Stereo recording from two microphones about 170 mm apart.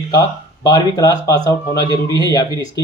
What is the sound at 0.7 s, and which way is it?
Speech, 25° left (ahead or behind).